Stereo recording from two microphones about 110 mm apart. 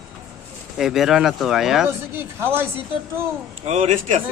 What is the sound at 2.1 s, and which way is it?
Speech, 20° right (ahead or behind).